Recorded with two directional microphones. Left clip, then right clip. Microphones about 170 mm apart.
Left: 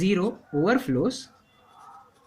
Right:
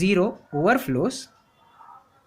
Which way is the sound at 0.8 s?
50° right (ahead or behind).